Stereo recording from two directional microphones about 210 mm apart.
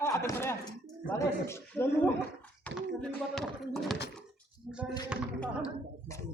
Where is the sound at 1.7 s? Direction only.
10° left (ahead or behind).